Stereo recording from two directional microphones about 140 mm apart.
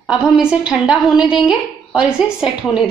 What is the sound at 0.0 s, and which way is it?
A woman's voice, 5° right (ahead or behind).